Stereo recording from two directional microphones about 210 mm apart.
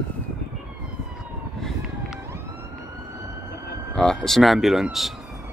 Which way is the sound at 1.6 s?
Centre (ahead or behind).